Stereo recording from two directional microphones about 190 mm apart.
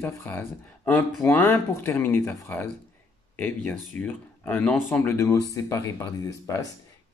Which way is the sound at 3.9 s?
10° left (ahead or behind).